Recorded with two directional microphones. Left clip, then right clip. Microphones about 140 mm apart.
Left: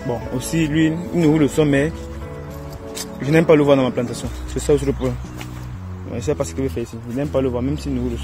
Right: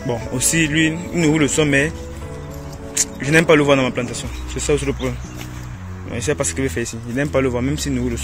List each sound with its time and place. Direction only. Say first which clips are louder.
0.0 s speech: right 2 dB; centre (ahead or behind)
0.6 s speech: right 1 dB; 25° left (ahead or behind)
2.9 s a man's voice: right 2 dB; 20° left (ahead or behind)
4.0 s speech: even; 35° left (ahead or behind)
6.1 s speech: right 1 dB; 5° left (ahead or behind)